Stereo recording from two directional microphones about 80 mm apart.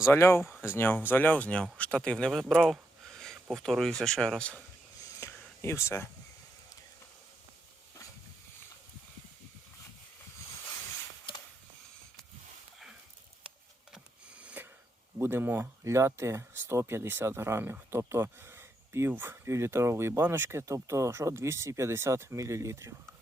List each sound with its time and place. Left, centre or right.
0.0 s speech: left; by 2.7 s centre
3.1 s a sound: centre
3.5 s speech: centre
5.2 s whispering: left
5.6 s speech: left
13.9 s a sound: centre
15.2 s speech: right